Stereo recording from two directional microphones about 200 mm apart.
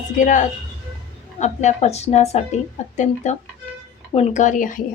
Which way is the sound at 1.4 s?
35° left (ahead or behind).